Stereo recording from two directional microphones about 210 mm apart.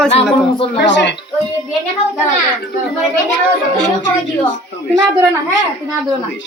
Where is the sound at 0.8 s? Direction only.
60° left (ahead or behind).